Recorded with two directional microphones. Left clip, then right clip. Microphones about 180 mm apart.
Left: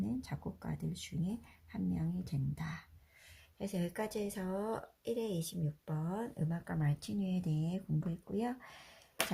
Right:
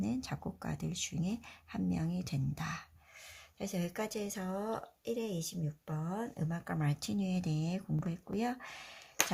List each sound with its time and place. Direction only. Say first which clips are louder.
0.0 s speech: right 3 dB; 25° right (ahead or behind)
3.6 s speech: right 1 dB; 10° right (ahead or behind)